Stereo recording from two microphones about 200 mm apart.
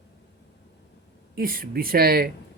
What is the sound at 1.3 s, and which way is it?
Speech, 45° right (ahead or behind).